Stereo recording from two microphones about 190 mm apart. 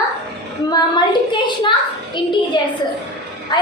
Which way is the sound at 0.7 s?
20° left (ahead or behind).